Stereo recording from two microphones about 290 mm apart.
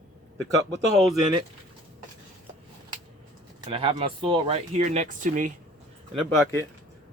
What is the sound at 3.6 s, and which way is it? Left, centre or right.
Speech, centre.